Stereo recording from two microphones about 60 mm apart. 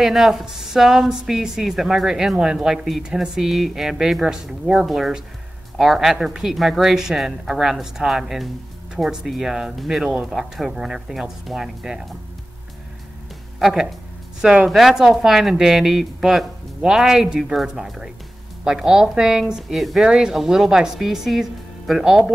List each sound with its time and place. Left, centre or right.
0.0 s a woman's voice: centre
13.6 s speech: centre
14.4 s a woman's voice: centre
14.7 s a woman's voice: centre